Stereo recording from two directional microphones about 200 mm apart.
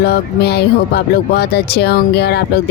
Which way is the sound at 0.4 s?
55° left (ahead or behind).